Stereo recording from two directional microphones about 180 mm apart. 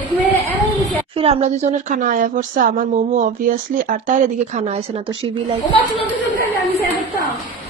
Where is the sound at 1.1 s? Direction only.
35° right (ahead or behind).